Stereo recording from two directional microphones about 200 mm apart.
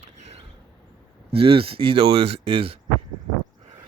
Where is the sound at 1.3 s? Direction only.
30° right (ahead or behind).